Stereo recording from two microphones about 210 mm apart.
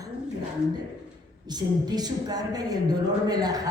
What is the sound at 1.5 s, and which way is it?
Speech, 20° right (ahead or behind).